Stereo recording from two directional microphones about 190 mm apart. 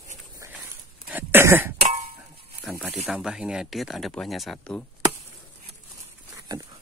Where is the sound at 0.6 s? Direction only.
10° right (ahead or behind).